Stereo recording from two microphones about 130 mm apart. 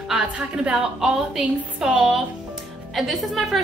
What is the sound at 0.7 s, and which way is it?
A woman's voice, 5° right (ahead or behind).